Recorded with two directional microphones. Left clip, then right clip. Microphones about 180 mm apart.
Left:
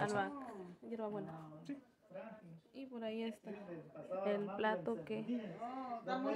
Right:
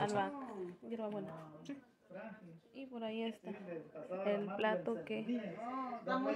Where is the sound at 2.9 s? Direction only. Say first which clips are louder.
Right 2 dB; 5° right (ahead or behind).